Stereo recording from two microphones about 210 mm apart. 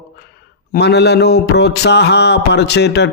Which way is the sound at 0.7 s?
50° left (ahead or behind).